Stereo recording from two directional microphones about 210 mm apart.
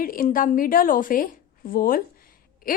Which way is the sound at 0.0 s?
40° left (ahead or behind).